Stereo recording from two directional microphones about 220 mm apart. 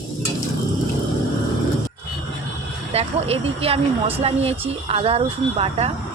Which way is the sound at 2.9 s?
25° right (ahead or behind).